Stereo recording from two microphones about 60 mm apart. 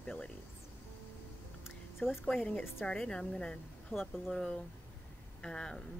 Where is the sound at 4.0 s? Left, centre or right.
Centre.